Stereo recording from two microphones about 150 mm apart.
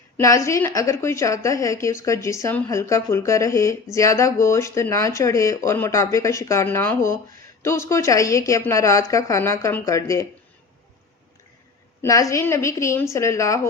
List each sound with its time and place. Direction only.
0.2 s a woman's voice: 20° left (ahead or behind)
12.0 s a woman's voice: 20° left (ahead or behind)